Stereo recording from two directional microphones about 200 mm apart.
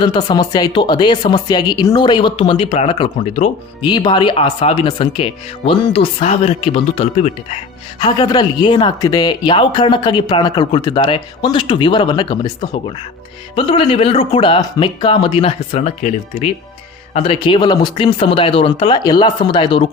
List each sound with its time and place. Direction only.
0.0 s speech: 20° left (ahead or behind)
13.6 s speech: 25° left (ahead or behind)